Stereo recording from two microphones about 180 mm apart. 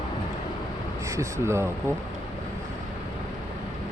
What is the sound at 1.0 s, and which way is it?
Speech, 15° right (ahead or behind).